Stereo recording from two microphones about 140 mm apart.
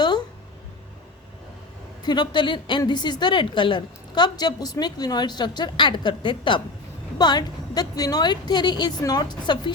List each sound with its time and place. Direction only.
2.0 s a woman's voice: 30° left (ahead or behind)